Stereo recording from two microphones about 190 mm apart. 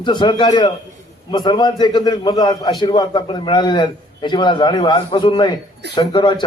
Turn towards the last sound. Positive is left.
turn(degrees=20)  # may be behind; listen again after turning